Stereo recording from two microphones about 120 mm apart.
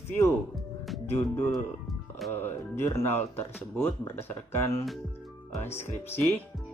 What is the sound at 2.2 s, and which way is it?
Speech, 20° left (ahead or behind).